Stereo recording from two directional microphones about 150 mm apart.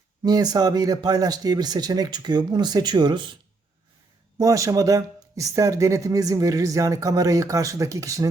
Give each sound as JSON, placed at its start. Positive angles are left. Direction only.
{"t": 0.2, "sound": "speech", "side_deg": -25}
{"t": 4.4, "sound": "speech", "side_deg": -20}